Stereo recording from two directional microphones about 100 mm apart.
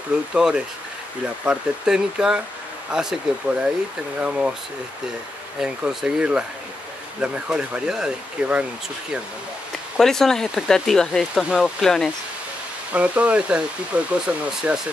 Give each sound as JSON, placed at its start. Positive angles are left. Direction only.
{"t": 0.3, "sound": "speech", "side_deg": -5}
{"t": 4.2, "sound": "speech", "side_deg": -10}
{"t": 5.6, "sound": "speech", "side_deg": -5}
{"t": 9.9, "sound": "speech", "side_deg": 5}
{"t": 12.9, "sound": "speech", "side_deg": -15}